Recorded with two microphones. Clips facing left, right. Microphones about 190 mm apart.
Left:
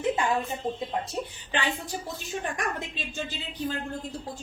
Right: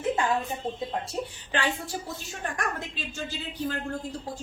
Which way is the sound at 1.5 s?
20° left (ahead or behind).